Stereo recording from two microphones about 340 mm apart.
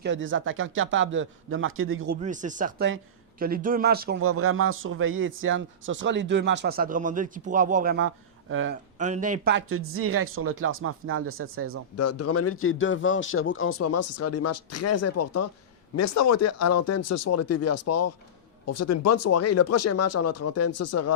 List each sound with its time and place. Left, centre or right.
0.0 s a man's voice: right
2.2 s speech: right
4.2 s a man's voice: right
9.0 s a man's voice: right
11.9 s a man's voice: left